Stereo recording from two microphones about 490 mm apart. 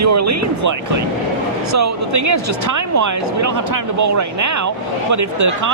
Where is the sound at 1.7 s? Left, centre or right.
Right.